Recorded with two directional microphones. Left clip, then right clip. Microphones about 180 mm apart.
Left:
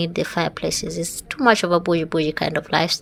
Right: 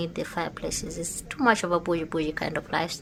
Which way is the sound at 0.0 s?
25° left (ahead or behind).